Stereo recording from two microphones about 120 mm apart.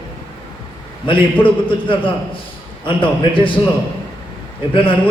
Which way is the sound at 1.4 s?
45° left (ahead or behind).